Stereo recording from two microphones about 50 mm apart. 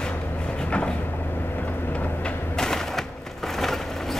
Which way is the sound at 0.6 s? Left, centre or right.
Left.